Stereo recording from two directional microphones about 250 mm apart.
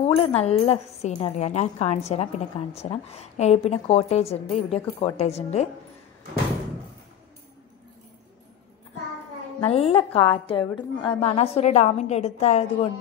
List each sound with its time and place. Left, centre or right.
0.0 s a woman's voice: left
9.6 s a woman's voice: left